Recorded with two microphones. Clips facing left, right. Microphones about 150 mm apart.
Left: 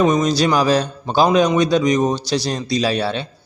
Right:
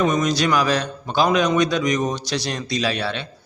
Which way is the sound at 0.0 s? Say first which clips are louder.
Left 4 dB; 30° left (ahead or behind).